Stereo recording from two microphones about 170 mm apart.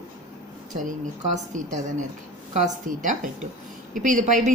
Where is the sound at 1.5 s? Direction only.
45° right (ahead or behind).